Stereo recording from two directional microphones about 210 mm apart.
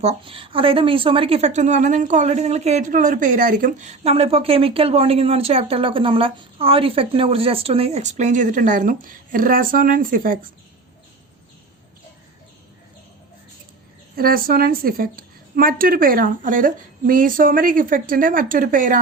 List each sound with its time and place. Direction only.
0.0 s a woman's voice: 30° right (ahead or behind)
14.2 s a woman's voice: 45° right (ahead or behind)